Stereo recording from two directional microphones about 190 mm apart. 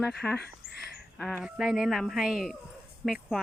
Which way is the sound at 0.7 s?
60° left (ahead or behind).